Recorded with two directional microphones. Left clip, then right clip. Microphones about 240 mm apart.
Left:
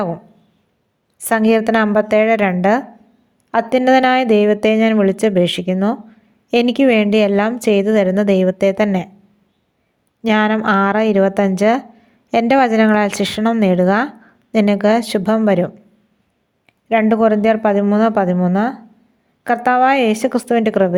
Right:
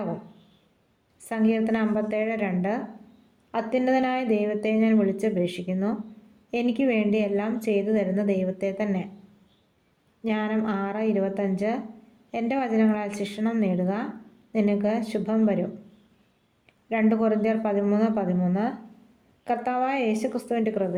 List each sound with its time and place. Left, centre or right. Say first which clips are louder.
1.2 s a woman's voice: left 12 dB; left
10.2 s a woman's voice: left 13 dB; left
16.9 s a woman's voice: left 11 dB; left